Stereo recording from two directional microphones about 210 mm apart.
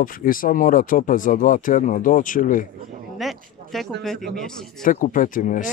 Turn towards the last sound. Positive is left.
turn(degrees=40)  # may be behind; listen again after turning